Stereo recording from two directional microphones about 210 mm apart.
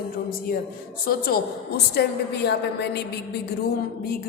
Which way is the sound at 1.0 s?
45° left (ahead or behind).